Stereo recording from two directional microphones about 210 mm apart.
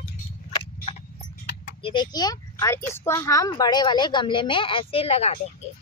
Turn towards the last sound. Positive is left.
turn(degrees=30)  # may be behind; listen again after turning